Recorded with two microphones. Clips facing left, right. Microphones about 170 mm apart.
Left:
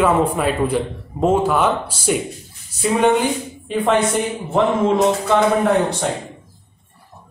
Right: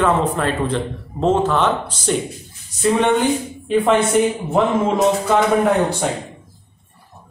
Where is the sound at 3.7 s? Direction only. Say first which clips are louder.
Right 3 dB; centre (ahead or behind).